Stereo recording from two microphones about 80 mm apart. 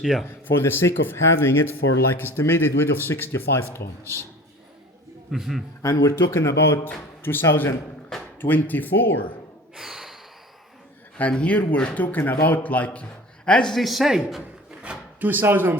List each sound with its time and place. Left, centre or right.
0.0 s a man's voice: centre
0.4 s speech: left
5.3 s a man's voice: centre
5.8 s a man's voice: left
9.7 s snort: centre
11.2 s speech: centre
14.8 s drawer open or close: centre
15.3 s speech: right